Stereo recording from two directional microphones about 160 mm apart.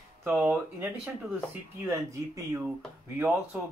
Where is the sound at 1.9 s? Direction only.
20° right (ahead or behind).